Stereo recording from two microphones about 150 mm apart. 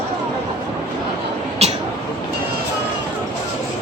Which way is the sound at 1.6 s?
45° right (ahead or behind).